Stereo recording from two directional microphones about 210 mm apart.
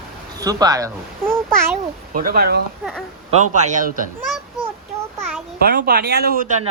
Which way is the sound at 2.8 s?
Centre (ahead or behind).